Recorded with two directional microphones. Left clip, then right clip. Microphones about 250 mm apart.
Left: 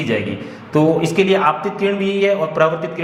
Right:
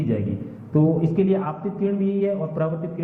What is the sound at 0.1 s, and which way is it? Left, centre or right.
A man's voice, centre.